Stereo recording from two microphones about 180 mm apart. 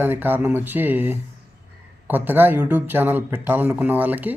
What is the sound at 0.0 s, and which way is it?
A man's voice, 10° right (ahead or behind).